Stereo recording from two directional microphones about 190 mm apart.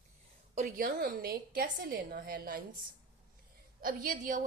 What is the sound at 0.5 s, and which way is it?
A woman's voice, 45° right (ahead or behind).